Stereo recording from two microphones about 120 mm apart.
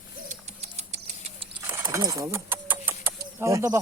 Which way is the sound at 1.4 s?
50° right (ahead or behind).